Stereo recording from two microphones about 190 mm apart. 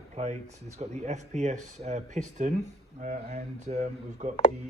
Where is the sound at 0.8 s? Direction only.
35° right (ahead or behind).